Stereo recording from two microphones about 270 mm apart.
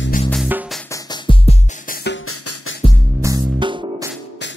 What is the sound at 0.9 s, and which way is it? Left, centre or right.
Music, centre.